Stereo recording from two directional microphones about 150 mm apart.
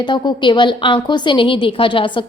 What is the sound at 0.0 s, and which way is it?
A woman's voice, 30° left (ahead or behind).